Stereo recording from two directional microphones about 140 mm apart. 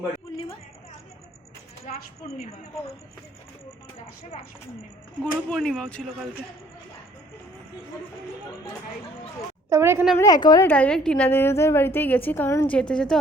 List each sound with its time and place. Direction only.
1.9 s a woman's voice: 50° left (ahead or behind)
5.2 s speech: 5° left (ahead or behind)
9.6 s a sound: 20° right (ahead or behind)
10.2 s a woman's voice: 30° left (ahead or behind)
10.7 s a woman's voice: 10° left (ahead or behind)